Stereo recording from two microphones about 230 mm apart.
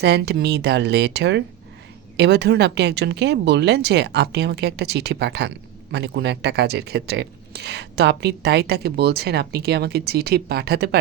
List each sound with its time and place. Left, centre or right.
0.0 s speech: right